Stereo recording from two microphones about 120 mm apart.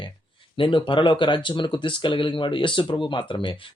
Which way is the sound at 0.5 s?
45° left (ahead or behind).